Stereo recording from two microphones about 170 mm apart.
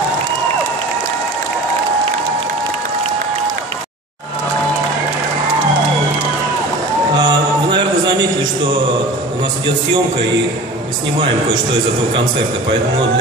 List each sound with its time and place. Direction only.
7.2 s music: 25° right (ahead or behind)